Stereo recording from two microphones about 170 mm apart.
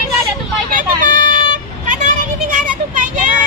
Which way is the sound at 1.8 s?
45° right (ahead or behind).